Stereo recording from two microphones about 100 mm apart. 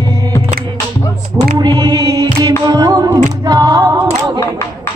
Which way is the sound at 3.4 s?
40° right (ahead or behind).